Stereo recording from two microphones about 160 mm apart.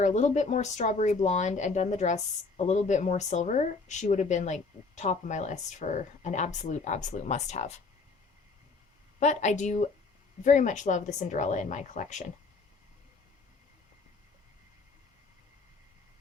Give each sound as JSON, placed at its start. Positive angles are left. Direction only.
{"t": 0.0, "sound": "speech", "side_deg": 45}
{"t": 9.2, "sound": "speech", "side_deg": 50}